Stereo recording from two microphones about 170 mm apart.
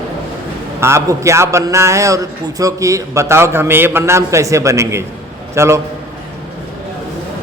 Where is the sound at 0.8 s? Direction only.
15° right (ahead or behind).